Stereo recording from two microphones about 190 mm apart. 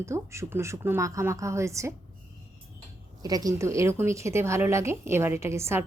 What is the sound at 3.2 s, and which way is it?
A woman's voice, 20° right (ahead or behind).